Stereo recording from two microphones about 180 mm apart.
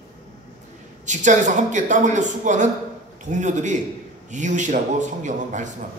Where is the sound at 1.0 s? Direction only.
40° right (ahead or behind).